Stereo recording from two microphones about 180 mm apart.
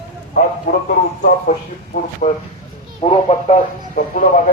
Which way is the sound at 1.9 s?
40° left (ahead or behind).